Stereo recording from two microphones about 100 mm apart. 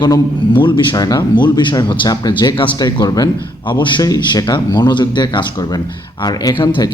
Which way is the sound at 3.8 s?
50° left (ahead or behind).